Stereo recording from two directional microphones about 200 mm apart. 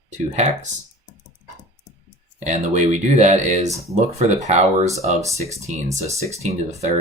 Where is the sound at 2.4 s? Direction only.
35° right (ahead or behind).